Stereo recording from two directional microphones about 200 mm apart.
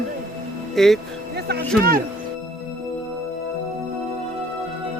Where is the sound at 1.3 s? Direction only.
55° right (ahead or behind).